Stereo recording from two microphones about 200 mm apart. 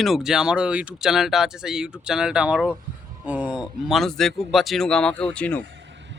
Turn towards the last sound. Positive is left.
turn(degrees=-65)  # may be behind; listen again after turning